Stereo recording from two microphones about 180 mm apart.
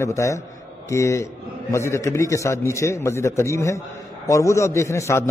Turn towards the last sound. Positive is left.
turn(degrees=15)  # may be behind; listen again after turning